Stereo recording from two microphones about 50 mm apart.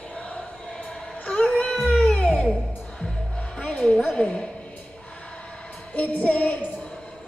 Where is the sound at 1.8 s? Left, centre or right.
Centre.